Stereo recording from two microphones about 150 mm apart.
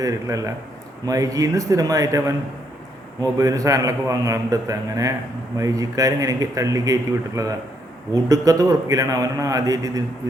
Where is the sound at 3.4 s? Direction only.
20° right (ahead or behind).